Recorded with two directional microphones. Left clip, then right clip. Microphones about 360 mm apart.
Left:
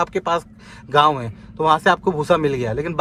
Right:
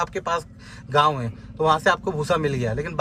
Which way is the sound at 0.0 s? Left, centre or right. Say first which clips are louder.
Left 4 dB; centre.